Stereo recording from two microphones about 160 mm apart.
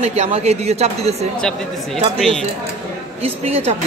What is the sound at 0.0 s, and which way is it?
Speech, 40° right (ahead or behind).